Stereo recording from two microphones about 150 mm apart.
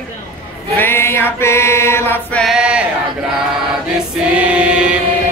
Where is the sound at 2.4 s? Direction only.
5° right (ahead or behind).